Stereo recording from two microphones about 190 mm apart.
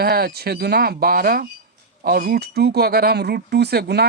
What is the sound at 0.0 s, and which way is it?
Speech, 55° right (ahead or behind).